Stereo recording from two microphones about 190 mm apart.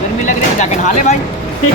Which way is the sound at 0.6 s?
40° left (ahead or behind).